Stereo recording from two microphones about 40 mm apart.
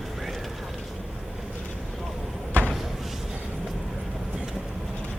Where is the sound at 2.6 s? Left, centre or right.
Left.